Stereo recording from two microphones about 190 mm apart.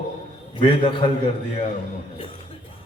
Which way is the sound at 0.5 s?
25° left (ahead or behind).